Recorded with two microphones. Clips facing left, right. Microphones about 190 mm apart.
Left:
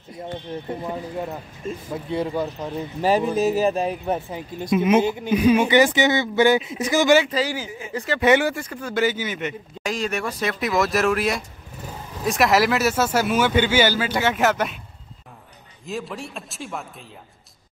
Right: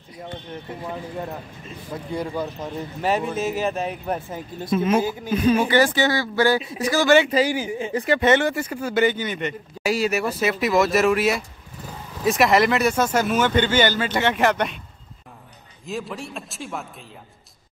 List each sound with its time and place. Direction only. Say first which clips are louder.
1.6 s speech: left 9 dB; 45° left (ahead or behind)
2.3 s speech: left 2 dB; centre (ahead or behind)
3.0 s speech: left 4 dB; 30° left (ahead or behind)
4.3 s speech: left 2 dB; 15° left (ahead or behind)
7.2 s speech: right 4 dB; 15° right (ahead or behind)
8.2 s speech: left 3 dB; 5° left (ahead or behind)
8.5 s speech: right 3 dB; 5° right (ahead or behind)
9.1 s speech: right 1 dB; 5° left (ahead or behind)
9.8 s speech: right 4 dB; 5° right (ahead or behind)
15.8 s speech: even; centre (ahead or behind)